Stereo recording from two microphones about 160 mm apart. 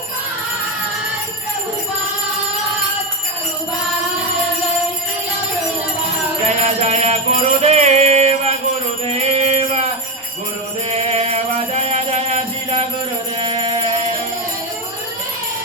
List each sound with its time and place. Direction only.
6.7 s music: 40° right (ahead or behind)
9.2 s mantra: 45° right (ahead or behind)
10.9 s music: 40° right (ahead or behind)